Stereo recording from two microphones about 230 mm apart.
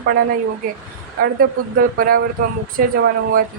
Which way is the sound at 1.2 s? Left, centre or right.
Right.